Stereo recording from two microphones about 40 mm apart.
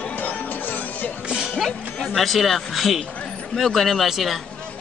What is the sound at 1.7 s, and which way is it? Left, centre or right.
Music, left.